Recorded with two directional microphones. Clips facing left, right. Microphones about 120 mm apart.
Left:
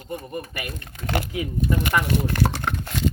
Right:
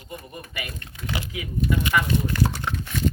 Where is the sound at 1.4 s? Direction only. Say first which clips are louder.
Right 3 dB; 45° left (ahead or behind).